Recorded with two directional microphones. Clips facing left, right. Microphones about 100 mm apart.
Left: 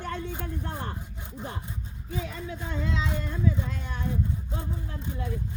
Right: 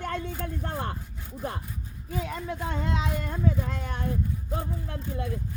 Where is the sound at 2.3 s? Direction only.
60° right (ahead or behind).